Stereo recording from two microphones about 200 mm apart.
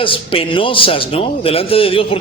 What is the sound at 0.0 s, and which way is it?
A man's voice, 25° left (ahead or behind).